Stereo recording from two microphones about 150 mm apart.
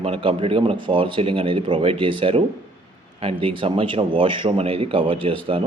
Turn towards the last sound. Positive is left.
turn(degrees=-35)  # may be behind; listen again after turning